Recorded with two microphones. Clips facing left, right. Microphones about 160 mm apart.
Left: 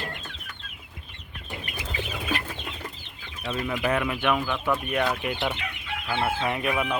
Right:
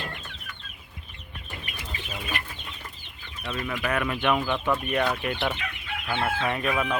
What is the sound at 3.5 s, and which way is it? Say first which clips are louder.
Speech: left 2 dB; 15° left (ahead or behind).